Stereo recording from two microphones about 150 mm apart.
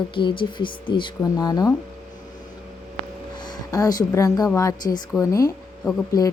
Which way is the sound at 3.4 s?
25° left (ahead or behind).